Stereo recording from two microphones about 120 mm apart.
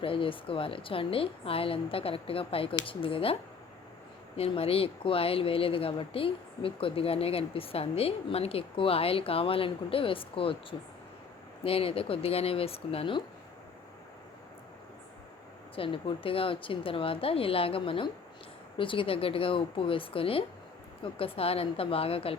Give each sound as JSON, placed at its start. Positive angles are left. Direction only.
{"t": 0.0, "sound": "speech", "side_deg": 50}
{"t": 4.4, "sound": "speech", "side_deg": 55}
{"t": 15.7, "sound": "speech", "side_deg": 50}